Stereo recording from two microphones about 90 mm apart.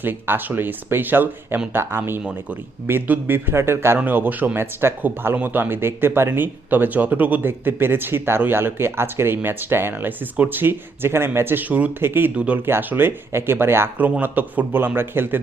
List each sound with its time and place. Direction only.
0.0 s a man's voice: 20° right (ahead or behind)